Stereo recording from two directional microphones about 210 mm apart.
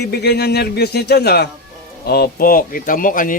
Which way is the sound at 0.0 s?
50° left (ahead or behind).